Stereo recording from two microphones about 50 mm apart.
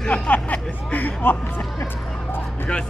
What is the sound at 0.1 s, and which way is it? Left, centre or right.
Speech, left.